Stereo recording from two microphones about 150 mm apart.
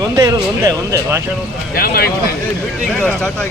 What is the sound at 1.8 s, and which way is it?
Speech, 90° left.